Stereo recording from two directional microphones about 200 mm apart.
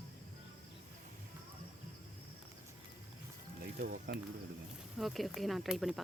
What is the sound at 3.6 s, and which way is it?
Speech, 45° right (ahead or behind).